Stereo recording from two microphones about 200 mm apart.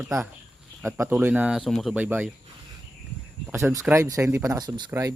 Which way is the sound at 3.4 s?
15° right (ahead or behind).